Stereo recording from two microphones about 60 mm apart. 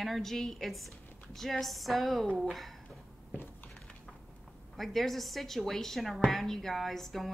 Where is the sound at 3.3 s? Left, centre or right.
Left.